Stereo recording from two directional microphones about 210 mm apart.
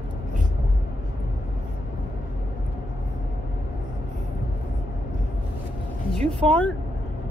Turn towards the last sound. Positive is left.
turn(degrees=5)  # may be behind; listen again after turning